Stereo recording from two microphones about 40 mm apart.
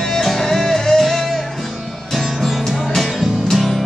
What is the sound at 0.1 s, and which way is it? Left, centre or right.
Music, centre.